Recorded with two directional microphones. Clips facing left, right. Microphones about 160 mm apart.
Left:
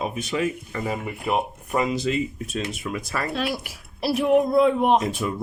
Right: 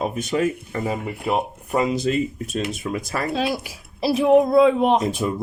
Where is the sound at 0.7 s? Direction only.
30° right (ahead or behind).